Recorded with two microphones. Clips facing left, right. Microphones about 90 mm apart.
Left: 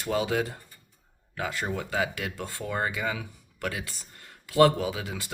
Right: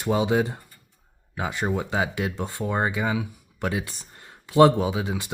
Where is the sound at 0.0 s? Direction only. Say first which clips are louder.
Right 5 dB; 20° right (ahead or behind).